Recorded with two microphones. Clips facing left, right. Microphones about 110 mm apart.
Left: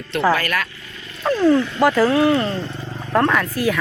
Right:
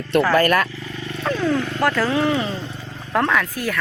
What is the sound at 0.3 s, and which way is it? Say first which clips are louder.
Speech: right 7 dB; 45° right (ahead or behind).